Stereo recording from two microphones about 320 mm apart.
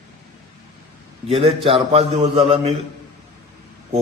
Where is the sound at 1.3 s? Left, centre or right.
Centre.